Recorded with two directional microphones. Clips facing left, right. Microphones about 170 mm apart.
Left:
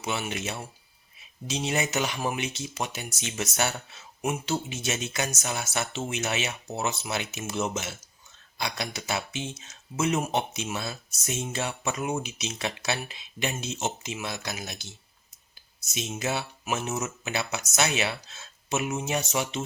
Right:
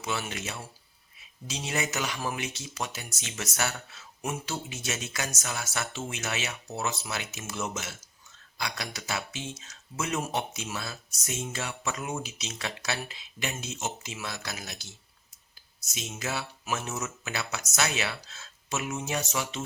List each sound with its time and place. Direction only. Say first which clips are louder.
0.0 s speech: left 3 dB; 20° left (ahead or behind)
16.0 s speech: left 4 dB; 20° left (ahead or behind)